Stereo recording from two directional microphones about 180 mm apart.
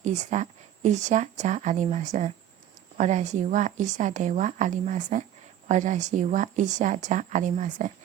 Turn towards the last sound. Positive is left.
turn(degrees=-40)  # may be behind; listen again after turning